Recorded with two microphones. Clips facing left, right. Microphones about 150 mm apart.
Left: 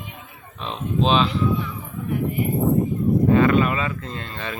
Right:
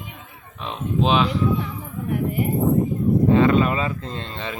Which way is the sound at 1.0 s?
15° right (ahead or behind).